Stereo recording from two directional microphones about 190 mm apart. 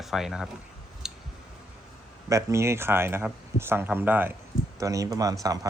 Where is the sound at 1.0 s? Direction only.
5° right (ahead or behind).